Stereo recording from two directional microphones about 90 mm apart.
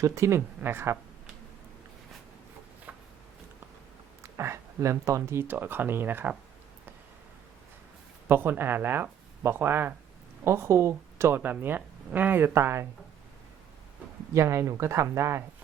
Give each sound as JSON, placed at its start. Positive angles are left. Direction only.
{"t": 0.0, "sound": "speech", "side_deg": -35}
{"t": 2.9, "sound": "a sound", "side_deg": -20}
{"t": 4.2, "sound": "speech", "side_deg": -30}
{"t": 8.3, "sound": "speech", "side_deg": -25}
{"t": 14.3, "sound": "speech", "side_deg": -30}